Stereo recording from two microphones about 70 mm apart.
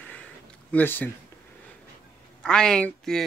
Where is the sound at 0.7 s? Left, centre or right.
Left.